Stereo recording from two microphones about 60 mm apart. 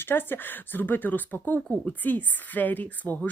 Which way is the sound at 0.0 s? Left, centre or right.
Left.